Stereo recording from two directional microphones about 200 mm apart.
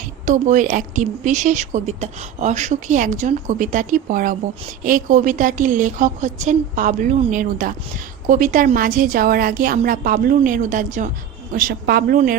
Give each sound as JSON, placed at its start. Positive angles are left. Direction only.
{"t": 0.3, "sound": "a woman's voice", "side_deg": -40}